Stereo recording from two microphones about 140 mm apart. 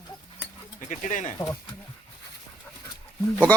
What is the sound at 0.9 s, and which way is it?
Speech, 65° left (ahead or behind).